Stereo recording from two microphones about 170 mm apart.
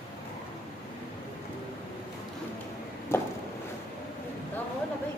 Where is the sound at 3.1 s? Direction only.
15° left (ahead or behind).